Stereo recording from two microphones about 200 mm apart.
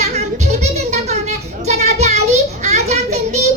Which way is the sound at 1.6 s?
35° right (ahead or behind).